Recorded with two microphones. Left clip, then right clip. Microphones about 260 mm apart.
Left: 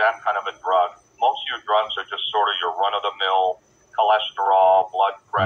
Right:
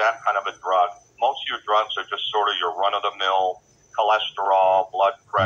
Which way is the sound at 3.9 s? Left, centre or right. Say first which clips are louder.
Left 2 dB; right.